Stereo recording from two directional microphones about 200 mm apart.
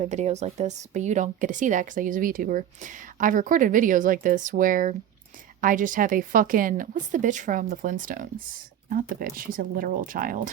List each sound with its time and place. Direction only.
0.0 s a woman's voice: 35° right (ahead or behind)